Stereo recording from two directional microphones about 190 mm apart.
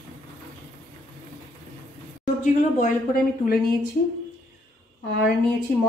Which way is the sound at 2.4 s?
40° left (ahead or behind).